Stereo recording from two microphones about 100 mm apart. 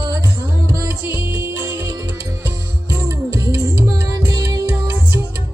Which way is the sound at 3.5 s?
30° right (ahead or behind).